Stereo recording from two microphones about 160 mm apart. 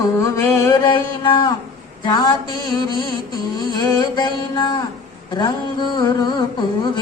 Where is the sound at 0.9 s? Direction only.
30° left (ahead or behind).